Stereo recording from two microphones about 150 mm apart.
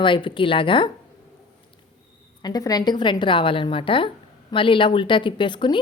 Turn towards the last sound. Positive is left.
turn(degrees=30)  # may be behind; listen again after turning